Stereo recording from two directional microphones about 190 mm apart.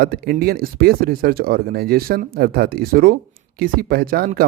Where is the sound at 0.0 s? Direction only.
55° right (ahead or behind).